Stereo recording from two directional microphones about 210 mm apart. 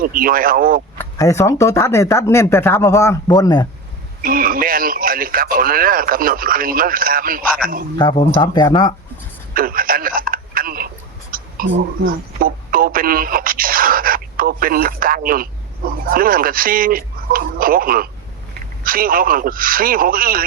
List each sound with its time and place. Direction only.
0.0 s speech: 45° right (ahead or behind)
0.9 s speech: 15° left (ahead or behind)
4.2 s speech: 45° right (ahead or behind)
7.9 s speech: 20° left (ahead or behind)
9.6 s a sound: 40° right (ahead or behind)
12.0 s speech: 45° right (ahead or behind)